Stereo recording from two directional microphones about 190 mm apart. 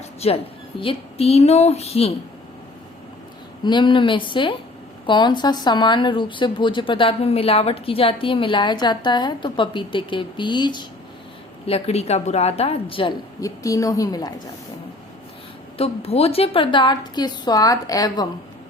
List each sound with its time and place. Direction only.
0.2 s a woman's voice: 35° left (ahead or behind)
3.6 s speech: 25° left (ahead or behind)
15.8 s speech: 30° left (ahead or behind)